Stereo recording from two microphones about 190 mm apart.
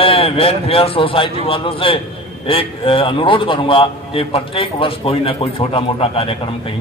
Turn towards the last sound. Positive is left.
turn(degrees=30)  # may be behind; listen again after turning